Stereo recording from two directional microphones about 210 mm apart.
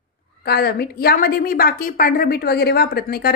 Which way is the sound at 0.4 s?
45° left (ahead or behind).